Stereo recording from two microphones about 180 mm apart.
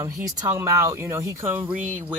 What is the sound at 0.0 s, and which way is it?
Speech, 20° right (ahead or behind).